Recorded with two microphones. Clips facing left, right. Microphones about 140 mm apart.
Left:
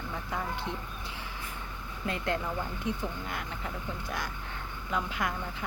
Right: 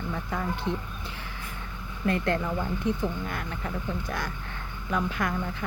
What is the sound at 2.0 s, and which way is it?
Speech, 15° left (ahead or behind).